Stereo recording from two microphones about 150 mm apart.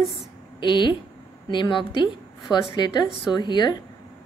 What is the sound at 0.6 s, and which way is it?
A woman's voice, 30° left (ahead or behind).